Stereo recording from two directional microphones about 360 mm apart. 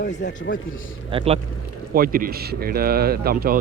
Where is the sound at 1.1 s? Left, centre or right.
Centre.